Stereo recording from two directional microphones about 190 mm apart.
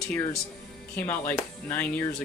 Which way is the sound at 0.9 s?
10° left (ahead or behind).